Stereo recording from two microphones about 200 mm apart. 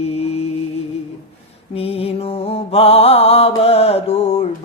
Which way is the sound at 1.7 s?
30° left (ahead or behind).